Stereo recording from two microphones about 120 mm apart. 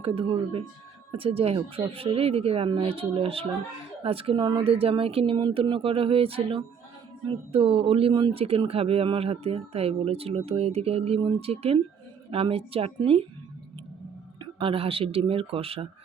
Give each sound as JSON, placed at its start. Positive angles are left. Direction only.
{"t": 0.2, "sound": "speech", "side_deg": -50}
{"t": 4.6, "sound": "speech", "side_deg": -55}
{"t": 14.3, "sound": "speech", "side_deg": -45}